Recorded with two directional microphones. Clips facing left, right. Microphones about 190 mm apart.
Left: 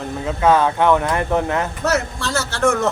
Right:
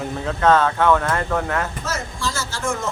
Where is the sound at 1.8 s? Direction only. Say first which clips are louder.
Left 6 dB; 65° left (ahead or behind).